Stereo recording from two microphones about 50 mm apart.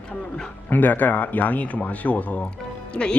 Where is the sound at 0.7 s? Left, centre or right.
Left.